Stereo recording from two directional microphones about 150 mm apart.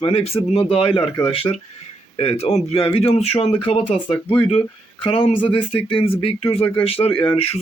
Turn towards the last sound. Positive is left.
turn(degrees=40)  # may be behind; listen again after turning